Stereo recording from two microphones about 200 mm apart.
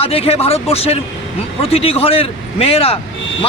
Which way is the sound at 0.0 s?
30° left (ahead or behind).